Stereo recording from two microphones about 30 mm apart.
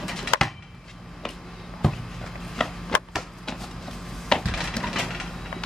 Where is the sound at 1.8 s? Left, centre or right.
Centre.